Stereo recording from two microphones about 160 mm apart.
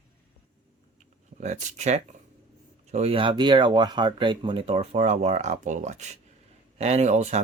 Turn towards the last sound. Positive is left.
turn(degrees=-45)  # may be behind; listen again after turning